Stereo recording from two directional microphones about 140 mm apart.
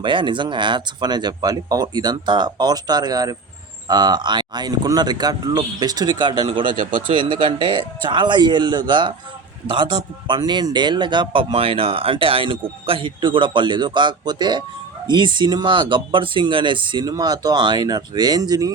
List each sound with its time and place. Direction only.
0.0 s speech: 35° right (ahead or behind)